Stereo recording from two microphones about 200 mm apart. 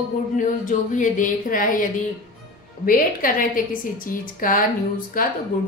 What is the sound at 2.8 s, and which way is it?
A woman's voice, 45° left (ahead or behind).